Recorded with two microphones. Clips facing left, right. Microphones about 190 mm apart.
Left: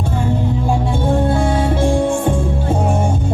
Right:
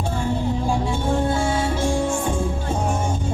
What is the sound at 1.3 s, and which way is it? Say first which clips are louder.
Music: left 5 dB; 60° left (ahead or behind).